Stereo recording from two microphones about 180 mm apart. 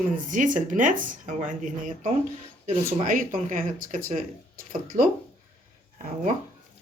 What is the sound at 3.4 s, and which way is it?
Speech, 45° right (ahead or behind).